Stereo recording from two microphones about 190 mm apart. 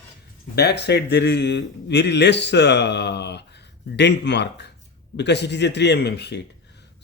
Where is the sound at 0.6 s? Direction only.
60° left (ahead or behind).